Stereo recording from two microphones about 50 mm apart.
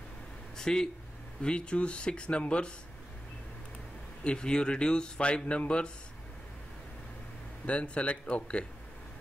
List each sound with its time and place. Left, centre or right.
0.6 s speech: centre
4.2 s speech: centre
7.6 s speech: left